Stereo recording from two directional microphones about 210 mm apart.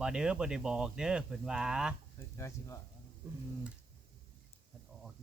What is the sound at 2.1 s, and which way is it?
Speech, 15° left (ahead or behind).